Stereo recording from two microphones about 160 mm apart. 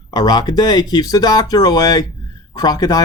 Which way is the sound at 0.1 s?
25° left (ahead or behind).